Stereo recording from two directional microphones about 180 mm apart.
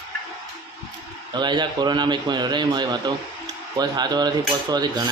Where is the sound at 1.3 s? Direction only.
25° right (ahead or behind).